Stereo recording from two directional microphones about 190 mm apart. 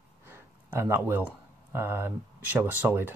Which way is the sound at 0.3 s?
10° right (ahead or behind).